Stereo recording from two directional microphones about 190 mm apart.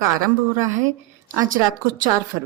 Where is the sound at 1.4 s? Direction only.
45° right (ahead or behind).